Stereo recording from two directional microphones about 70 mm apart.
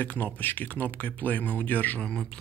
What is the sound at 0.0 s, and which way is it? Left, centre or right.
Speech, left.